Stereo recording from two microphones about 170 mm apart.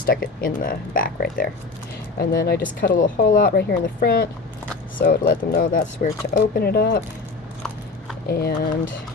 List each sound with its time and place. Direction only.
0.0 s speech: 60° left (ahead or behind)
2.1 s speech: 65° left (ahead or behind)
2.8 s speech: 55° left (ahead or behind)
8.3 s speech: 65° left (ahead or behind)